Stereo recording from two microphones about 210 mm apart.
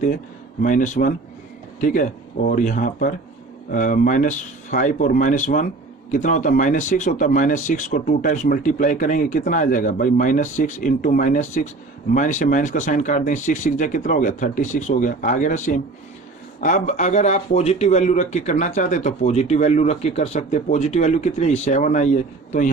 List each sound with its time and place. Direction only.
0.6 s speech: 40° left (ahead or behind)